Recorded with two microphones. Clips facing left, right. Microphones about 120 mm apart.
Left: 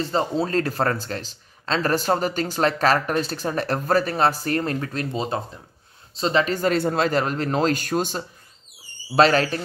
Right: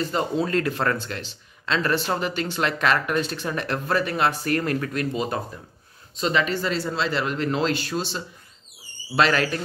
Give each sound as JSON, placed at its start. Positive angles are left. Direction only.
{"t": 0.0, "sound": "speech", "side_deg": 30}
{"t": 9.1, "sound": "speech", "side_deg": 35}